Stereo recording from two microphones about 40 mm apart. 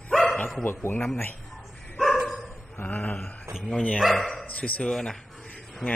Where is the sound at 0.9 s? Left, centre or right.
Left.